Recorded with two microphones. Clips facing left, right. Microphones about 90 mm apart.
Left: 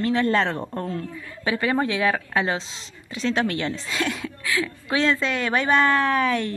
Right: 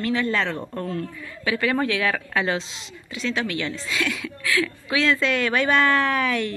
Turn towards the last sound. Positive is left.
turn(degrees=30)  # may be behind; listen again after turning